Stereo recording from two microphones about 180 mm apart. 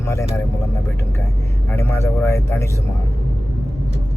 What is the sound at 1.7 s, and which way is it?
Speech, 15° left (ahead or behind).